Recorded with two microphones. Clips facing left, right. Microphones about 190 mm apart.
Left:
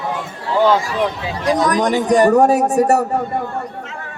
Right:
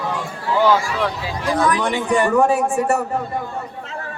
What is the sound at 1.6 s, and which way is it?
A man's voice, 40° left (ahead or behind).